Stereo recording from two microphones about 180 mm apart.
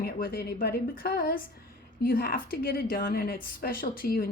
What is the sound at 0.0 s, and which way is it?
A woman's voice, 55° left (ahead or behind).